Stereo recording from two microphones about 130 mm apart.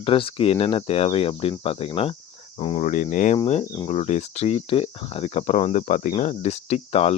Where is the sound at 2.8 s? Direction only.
75° left (ahead or behind).